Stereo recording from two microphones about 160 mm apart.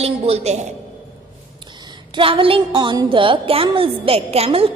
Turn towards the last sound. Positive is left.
turn(degrees=-40)  # may be behind; listen again after turning